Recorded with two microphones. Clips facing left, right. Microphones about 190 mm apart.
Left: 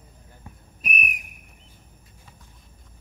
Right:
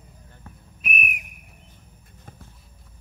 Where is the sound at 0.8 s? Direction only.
40° left (ahead or behind).